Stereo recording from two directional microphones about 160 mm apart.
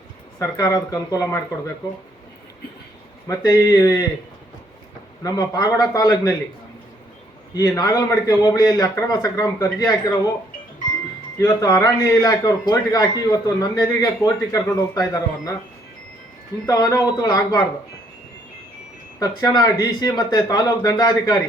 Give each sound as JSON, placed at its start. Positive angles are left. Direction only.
{"t": 0.3, "sound": "a man's voice", "side_deg": 20}
{"t": 3.2, "sound": "a man's voice", "side_deg": 20}
{"t": 5.2, "sound": "a man's voice", "side_deg": 20}
{"t": 7.5, "sound": "a man's voice", "side_deg": 25}
{"t": 11.3, "sound": "a man's voice", "side_deg": 20}
{"t": 16.6, "sound": "a man's voice", "side_deg": 20}
{"t": 19.2, "sound": "a man's voice", "side_deg": 25}